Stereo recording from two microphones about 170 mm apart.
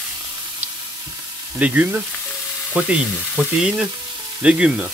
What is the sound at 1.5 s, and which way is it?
Speech, 10° right (ahead or behind).